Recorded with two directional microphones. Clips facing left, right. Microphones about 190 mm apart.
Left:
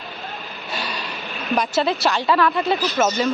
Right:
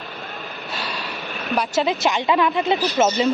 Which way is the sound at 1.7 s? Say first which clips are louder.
Right 2 dB; 15° right (ahead or behind).